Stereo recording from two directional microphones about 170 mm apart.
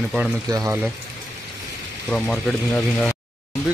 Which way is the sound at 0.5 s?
20° right (ahead or behind).